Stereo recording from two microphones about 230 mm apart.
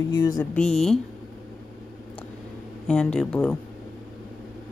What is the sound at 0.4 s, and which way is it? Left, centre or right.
Speech, centre.